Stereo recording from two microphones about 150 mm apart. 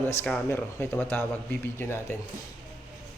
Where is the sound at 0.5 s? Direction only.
15° left (ahead or behind).